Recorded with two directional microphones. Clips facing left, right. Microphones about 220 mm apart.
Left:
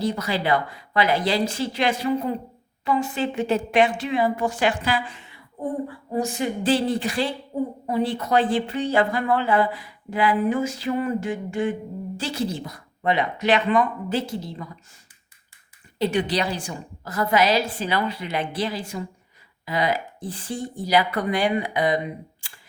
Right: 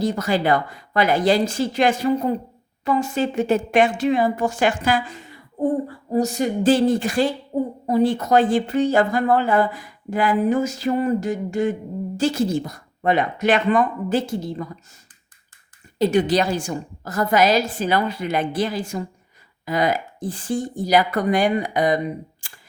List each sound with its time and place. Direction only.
0.0 s speech: 45° right (ahead or behind)
16.0 s speech: 45° right (ahead or behind)